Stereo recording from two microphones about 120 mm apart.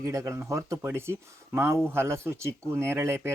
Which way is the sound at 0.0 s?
25° right (ahead or behind).